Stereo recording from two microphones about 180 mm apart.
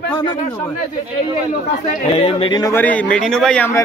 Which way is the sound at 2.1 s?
35° left (ahead or behind).